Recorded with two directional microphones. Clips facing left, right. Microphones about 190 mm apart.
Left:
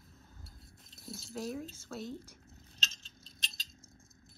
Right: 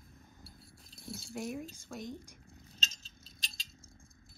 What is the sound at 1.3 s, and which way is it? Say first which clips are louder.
Speech: left 1 dB; 15° right (ahead or behind).